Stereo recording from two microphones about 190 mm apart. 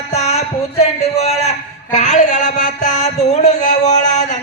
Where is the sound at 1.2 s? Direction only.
35° left (ahead or behind).